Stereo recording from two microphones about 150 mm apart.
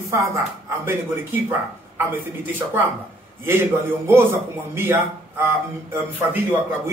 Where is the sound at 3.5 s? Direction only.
15° right (ahead or behind).